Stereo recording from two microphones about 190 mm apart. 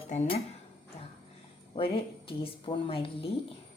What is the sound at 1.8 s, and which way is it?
A woman's voice, 30° left (ahead or behind).